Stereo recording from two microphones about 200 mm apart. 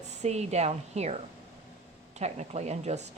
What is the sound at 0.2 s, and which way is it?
A woman's voice, 35° right (ahead or behind).